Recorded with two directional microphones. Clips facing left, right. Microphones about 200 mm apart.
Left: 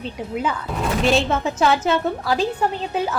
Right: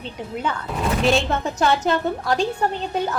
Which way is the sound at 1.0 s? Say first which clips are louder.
Left 2 dB; centre (ahead or behind).